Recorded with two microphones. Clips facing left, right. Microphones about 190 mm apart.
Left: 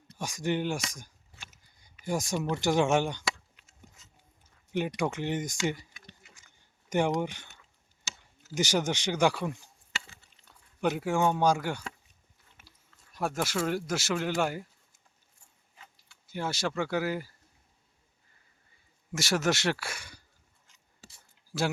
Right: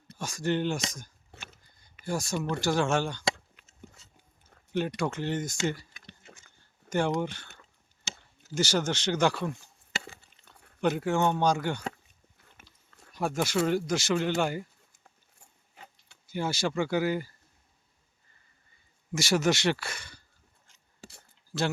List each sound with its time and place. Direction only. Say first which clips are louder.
0.2 s speech: right 1 dB; 15° left (ahead or behind)
1.6 s a sound: right 1 dB; 10° left (ahead or behind)
2.0 s speech: left 1 dB; 15° left (ahead or behind)
4.9 s speech: even; 15° left (ahead or behind)
8.5 s speech: even; 15° left (ahead or behind)
10.8 s speech: right 1 dB; 10° left (ahead or behind)
12.6 s chewing: right 2 dB; 50° right (ahead or behind)
13.1 s speech: right 3 dB; 5° left (ahead or behind)
16.2 s speech: right 2 dB; centre (ahead or behind)
19.1 s speech: right 2 dB; centre (ahead or behind)
21.0 s a sound: right 7 dB; 55° right (ahead or behind)
21.5 s speech: even; 15° left (ahead or behind)